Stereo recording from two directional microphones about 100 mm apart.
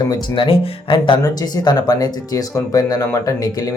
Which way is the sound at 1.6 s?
40° left (ahead or behind).